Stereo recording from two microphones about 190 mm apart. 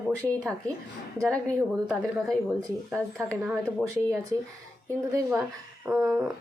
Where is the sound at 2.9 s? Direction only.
5° left (ahead or behind).